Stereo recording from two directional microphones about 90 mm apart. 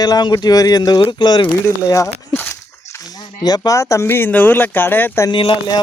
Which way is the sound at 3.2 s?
50° left (ahead or behind).